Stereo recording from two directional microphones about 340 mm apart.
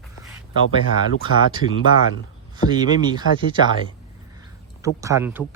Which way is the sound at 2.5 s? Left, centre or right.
Centre.